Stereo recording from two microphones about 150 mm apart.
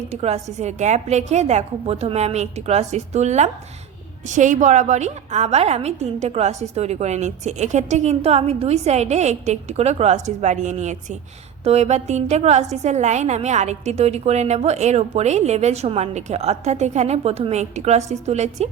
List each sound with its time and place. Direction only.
0.1 s a woman's voice: 45° right (ahead or behind)